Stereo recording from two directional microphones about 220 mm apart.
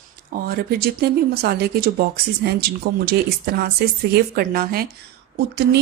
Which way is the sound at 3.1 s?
45° right (ahead or behind).